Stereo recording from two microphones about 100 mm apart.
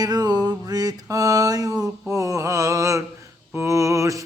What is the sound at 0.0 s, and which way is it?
Mantra, 40° right (ahead or behind).